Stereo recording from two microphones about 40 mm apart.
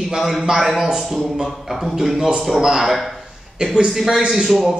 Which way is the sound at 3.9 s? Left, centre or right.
Centre.